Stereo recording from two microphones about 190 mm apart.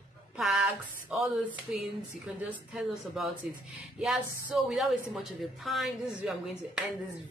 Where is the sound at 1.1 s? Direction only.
Centre (ahead or behind).